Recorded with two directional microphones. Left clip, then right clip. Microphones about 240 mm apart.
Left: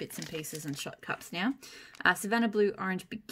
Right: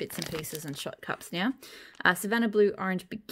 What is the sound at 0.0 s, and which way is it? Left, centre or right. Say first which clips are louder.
Speech: right 4 dB; right.